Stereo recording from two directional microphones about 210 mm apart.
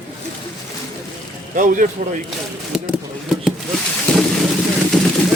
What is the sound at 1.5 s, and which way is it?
Speech, 40° right (ahead or behind).